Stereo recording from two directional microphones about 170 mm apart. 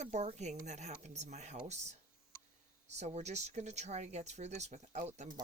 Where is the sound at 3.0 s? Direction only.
40° right (ahead or behind).